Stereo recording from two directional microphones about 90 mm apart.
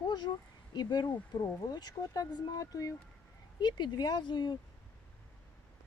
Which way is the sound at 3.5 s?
55° left (ahead or behind).